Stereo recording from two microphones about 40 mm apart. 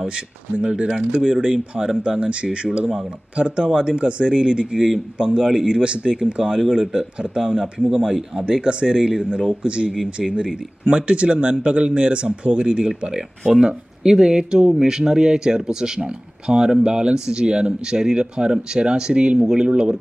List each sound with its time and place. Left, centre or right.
0.6 s speech: right